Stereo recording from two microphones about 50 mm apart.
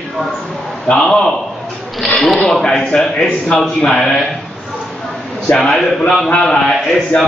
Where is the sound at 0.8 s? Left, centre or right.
Centre.